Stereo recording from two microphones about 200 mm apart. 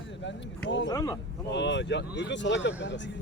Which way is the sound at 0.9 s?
20° left (ahead or behind).